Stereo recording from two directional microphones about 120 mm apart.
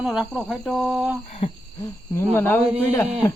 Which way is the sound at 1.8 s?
20° left (ahead or behind).